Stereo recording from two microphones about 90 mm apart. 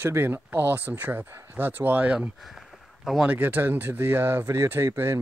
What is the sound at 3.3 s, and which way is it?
Speech, 20° right (ahead or behind).